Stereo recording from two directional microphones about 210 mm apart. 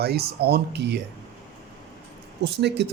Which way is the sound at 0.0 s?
50° right (ahead or behind).